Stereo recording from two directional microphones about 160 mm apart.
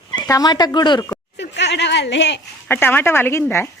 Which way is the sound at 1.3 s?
90° left.